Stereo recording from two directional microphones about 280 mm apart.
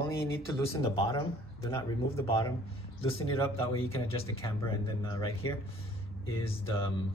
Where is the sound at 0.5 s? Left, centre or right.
Centre.